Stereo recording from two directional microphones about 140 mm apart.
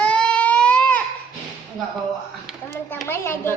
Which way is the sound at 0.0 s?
10° left (ahead or behind).